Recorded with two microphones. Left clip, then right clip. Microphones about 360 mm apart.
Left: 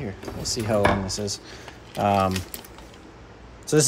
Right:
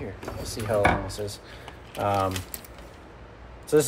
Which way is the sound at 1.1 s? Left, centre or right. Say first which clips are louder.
Left 4 dB; left.